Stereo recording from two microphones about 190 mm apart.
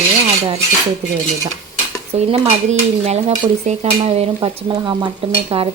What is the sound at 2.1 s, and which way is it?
Cutlery, 35° right (ahead or behind).